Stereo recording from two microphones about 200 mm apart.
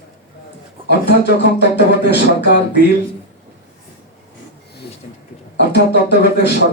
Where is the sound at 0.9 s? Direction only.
60° left (ahead or behind).